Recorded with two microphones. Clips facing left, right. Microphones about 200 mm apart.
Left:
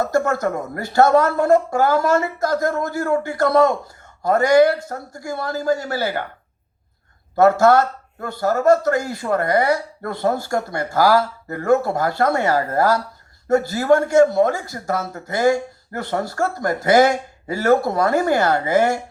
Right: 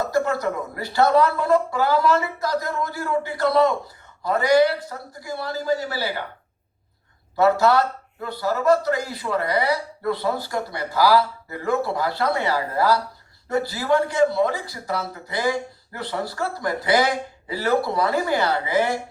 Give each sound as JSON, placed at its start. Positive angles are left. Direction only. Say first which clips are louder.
{"t": 0.0, "sound": "speech", "louder": "left 3 dB", "side_deg": 45}
{"t": 7.3, "sound": "speech", "louder": "left 4 dB", "side_deg": 50}